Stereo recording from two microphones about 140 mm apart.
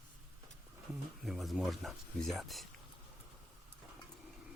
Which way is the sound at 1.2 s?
Centre (ahead or behind).